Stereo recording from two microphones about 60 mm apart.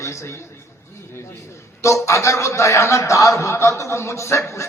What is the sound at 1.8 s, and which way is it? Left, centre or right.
A man's voice, left.